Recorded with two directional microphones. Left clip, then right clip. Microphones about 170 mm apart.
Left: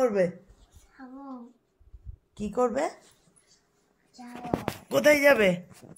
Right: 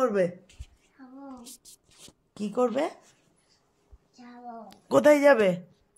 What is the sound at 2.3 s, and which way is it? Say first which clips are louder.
Speech: even; 15° right (ahead or behind).